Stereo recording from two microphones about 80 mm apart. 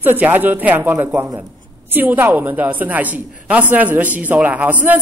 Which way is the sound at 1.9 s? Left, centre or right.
Right.